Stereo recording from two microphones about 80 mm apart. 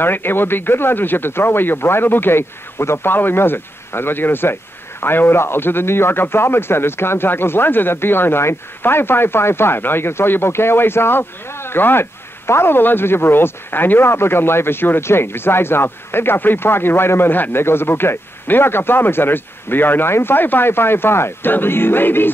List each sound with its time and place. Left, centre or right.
0.0 s a man's voice: left